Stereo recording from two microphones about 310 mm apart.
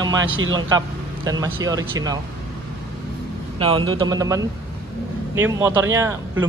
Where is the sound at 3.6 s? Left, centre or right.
Centre.